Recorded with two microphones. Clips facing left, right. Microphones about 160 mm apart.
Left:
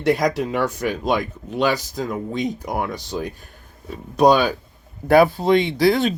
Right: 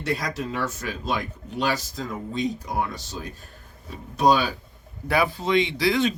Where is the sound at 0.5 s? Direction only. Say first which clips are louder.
Left 7 dB; 65° left (ahead or behind).